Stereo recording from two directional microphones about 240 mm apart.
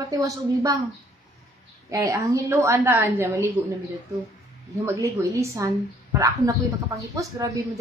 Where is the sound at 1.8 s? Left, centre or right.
Centre.